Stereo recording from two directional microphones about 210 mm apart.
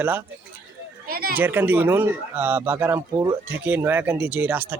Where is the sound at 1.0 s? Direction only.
45° right (ahead or behind).